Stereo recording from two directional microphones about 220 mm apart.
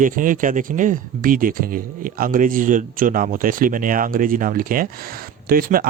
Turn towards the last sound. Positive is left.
turn(degrees=-40)  # may be behind; listen again after turning